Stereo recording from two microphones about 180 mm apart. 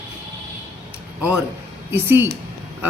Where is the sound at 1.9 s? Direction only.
10° right (ahead or behind).